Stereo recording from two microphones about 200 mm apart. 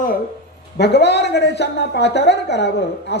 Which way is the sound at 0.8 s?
55° left (ahead or behind).